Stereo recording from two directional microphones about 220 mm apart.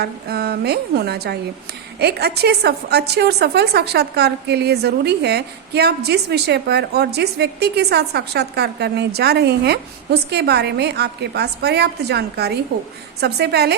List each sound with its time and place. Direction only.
0.0 s a woman's voice: 45° right (ahead or behind)